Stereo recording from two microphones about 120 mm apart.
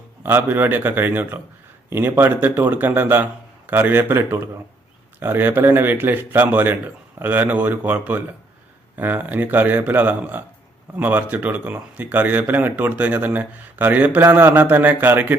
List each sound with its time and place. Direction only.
0.2 s a man's voice: 15° right (ahead or behind)